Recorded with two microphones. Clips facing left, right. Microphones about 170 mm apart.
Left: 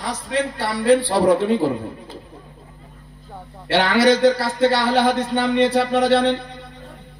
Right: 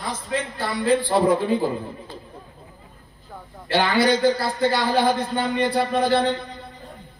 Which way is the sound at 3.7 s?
80° left.